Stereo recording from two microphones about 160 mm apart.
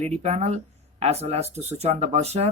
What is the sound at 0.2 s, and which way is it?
Speech, 45° right (ahead or behind).